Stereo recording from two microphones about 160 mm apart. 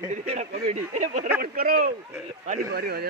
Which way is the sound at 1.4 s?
65° right (ahead or behind).